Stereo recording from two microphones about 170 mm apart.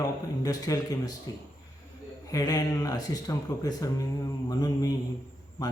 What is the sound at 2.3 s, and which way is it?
Speech, 20° left (ahead or behind).